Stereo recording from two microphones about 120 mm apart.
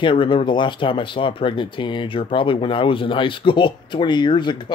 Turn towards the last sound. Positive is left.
turn(degrees=40)  # may be behind; listen again after turning